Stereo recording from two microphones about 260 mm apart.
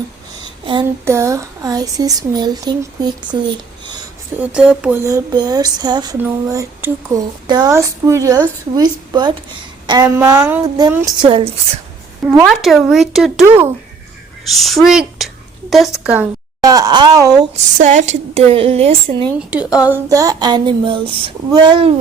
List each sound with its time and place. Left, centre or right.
0.6 s speech: centre
4.4 s speech: centre
12.2 s a woman's voice: centre
17.7 s a woman's voice: right
19.8 s speech: centre